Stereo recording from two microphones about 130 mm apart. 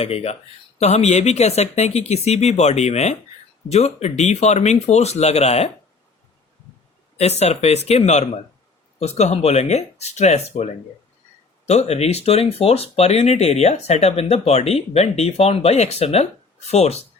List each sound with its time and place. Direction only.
0.0 s speech: 50° left (ahead or behind)
7.2 s speech: 55° left (ahead or behind)